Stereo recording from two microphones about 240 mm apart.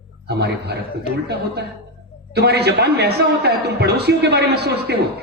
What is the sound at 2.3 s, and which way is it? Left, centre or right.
A man's voice, right.